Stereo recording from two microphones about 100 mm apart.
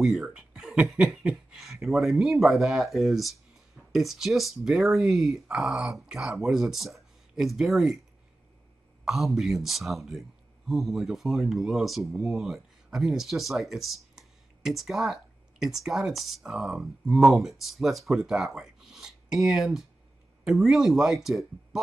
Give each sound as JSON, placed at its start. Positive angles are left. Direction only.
{"t": 0.0, "sound": "speech", "side_deg": -5}
{"t": 9.0, "sound": "speech", "side_deg": 0}